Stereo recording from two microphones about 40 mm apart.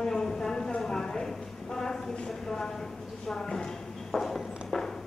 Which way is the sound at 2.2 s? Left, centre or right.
Centre.